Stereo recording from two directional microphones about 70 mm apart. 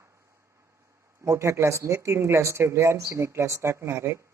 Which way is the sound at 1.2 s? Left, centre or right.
Right.